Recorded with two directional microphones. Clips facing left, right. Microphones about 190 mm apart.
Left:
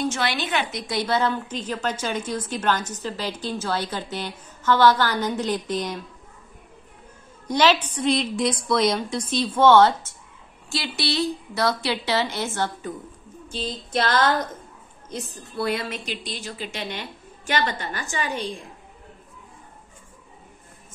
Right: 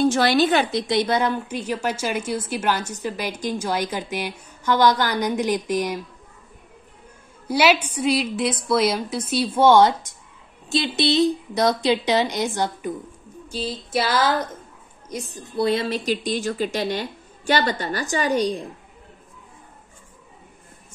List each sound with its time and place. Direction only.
0.0 s a woman's voice: 35° right (ahead or behind); by 6.0 s 10° right (ahead or behind)
7.4 s a woman's voice: 10° right (ahead or behind)
15.6 s a woman's voice: 25° right (ahead or behind)
16.1 s a woman's voice: 45° right (ahead or behind)